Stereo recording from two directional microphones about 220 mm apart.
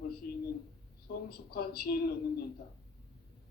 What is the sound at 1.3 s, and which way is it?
Speech, 45° left (ahead or behind).